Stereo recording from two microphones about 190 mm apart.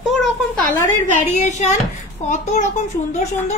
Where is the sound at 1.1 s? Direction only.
40° left (ahead or behind).